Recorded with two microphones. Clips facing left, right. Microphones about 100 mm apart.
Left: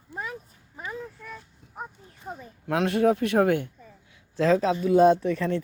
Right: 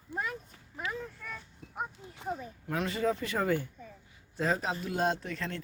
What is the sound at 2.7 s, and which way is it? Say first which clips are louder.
Speech: left 9 dB; 70° left (ahead or behind).